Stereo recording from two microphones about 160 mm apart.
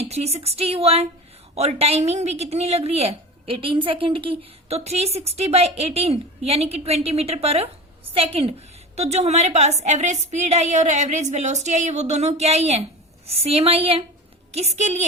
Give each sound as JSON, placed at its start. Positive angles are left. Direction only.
{"t": 0.1, "sound": "a woman's voice", "side_deg": -40}